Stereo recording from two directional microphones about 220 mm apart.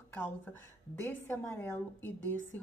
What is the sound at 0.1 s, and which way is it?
Speech, 10° left (ahead or behind).